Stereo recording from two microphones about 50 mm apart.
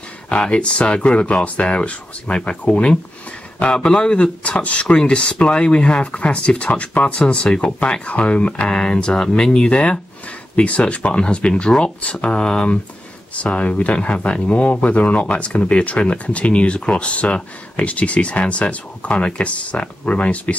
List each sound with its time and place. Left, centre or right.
0.3 s speech: left